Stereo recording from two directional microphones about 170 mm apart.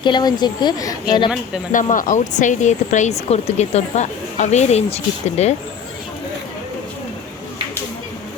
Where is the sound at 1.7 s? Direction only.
50° left (ahead or behind).